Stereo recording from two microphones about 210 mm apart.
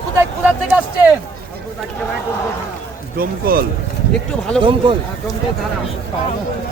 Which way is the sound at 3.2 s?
45° right (ahead or behind).